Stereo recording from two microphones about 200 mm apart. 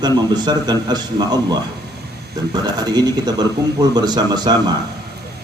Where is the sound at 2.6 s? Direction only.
20° right (ahead or behind).